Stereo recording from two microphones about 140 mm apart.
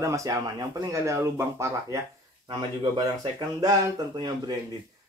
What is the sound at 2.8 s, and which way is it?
Speech, 30° right (ahead or behind).